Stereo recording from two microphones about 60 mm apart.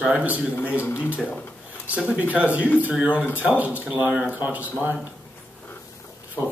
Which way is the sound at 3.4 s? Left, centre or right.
Right.